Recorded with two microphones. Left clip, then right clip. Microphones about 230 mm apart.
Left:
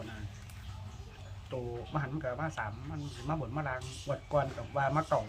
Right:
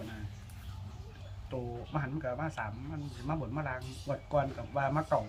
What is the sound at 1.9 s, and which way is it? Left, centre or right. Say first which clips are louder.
A man's voice: even; centre.